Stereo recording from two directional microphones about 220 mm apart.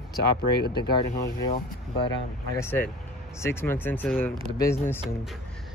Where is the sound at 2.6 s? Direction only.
10° left (ahead or behind).